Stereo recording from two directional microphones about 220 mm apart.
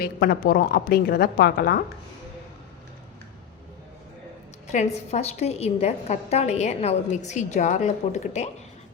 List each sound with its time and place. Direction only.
0.0 s a woman's voice: 45° left (ahead or behind)
4.7 s a woman's voice: 30° left (ahead or behind)